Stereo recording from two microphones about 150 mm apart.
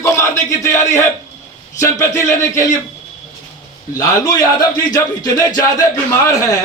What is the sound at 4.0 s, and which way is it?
Speech, 20° left (ahead or behind).